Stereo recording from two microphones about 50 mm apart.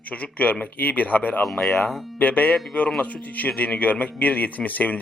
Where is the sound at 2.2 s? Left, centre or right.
Left.